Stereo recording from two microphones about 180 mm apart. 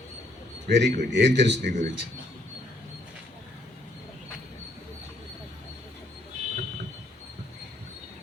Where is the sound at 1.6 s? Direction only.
45° right (ahead or behind).